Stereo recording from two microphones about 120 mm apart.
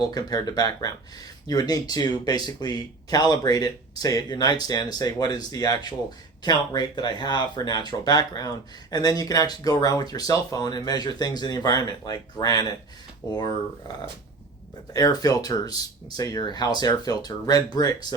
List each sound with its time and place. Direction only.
0.1 s speech: 30° left (ahead or behind)
14.9 s speech: 30° left (ahead or behind)